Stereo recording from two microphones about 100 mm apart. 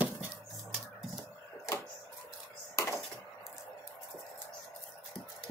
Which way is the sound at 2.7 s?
30° left (ahead or behind).